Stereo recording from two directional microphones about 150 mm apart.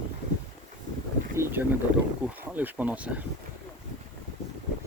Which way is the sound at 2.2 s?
10° right (ahead or behind).